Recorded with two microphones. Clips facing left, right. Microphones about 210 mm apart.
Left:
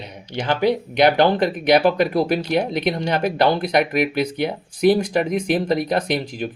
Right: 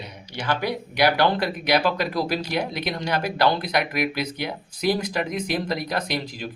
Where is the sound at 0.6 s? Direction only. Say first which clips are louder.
Left 7 dB; 20° left (ahead or behind).